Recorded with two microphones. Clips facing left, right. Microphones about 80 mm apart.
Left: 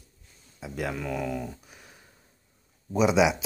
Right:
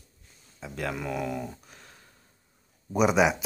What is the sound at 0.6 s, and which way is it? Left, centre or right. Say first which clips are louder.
Speech: left 1 dB; centre.